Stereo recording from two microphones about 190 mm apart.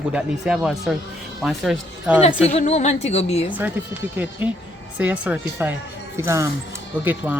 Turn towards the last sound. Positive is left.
turn(degrees=-10)  # may be behind; listen again after turning